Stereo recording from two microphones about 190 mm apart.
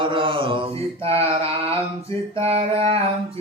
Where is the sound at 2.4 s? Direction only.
30° right (ahead or behind).